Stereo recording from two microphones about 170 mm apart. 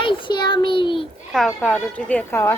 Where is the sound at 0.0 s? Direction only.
30° left (ahead or behind).